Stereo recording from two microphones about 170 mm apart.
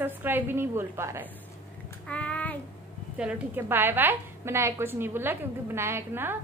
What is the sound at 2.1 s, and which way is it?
Child singing, 10° left (ahead or behind).